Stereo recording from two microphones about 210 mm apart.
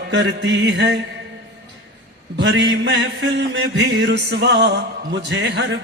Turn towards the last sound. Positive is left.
turn(degrees=-55)  # may be behind; listen again after turning